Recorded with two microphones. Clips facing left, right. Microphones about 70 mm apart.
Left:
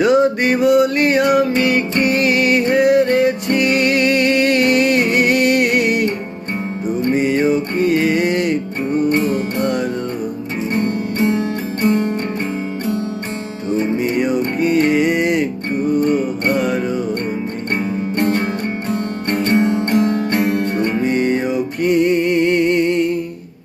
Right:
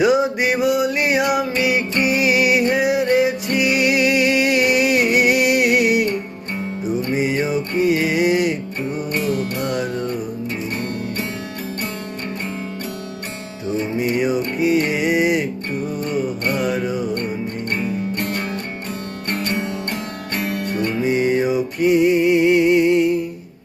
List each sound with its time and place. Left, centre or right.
0.0 s music: centre
7.1 s music: centre
9.0 s music: left
10.8 s music: left
14.0 s music: centre
16.0 s music: left
16.6 s music: centre
17.7 s music: left
21.0 s music: centre